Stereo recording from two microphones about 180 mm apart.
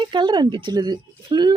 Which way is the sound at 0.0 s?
25° right (ahead or behind).